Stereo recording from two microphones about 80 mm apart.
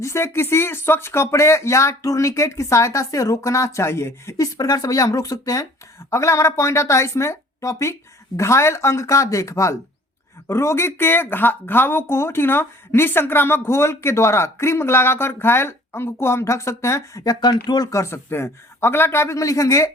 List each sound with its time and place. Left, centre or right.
0.0 s speech: left
17.2 s speech: left
17.9 s speech: left